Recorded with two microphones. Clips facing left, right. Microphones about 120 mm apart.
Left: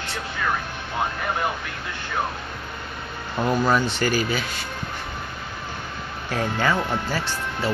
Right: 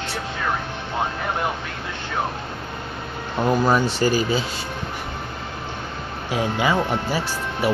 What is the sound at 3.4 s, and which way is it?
Speech, 10° right (ahead or behind).